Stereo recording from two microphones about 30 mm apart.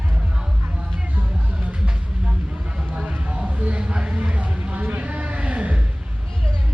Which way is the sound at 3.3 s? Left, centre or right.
Right.